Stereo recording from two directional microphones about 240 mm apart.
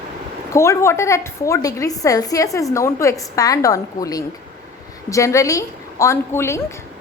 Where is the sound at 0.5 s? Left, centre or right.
Centre.